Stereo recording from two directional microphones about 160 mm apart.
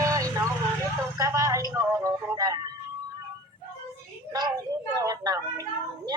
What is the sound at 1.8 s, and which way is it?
Music, 20° right (ahead or behind).